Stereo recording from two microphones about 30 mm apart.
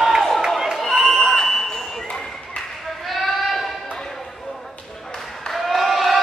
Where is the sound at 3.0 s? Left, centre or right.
Centre.